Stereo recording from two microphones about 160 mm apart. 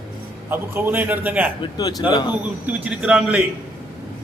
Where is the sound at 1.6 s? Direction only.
25° left (ahead or behind).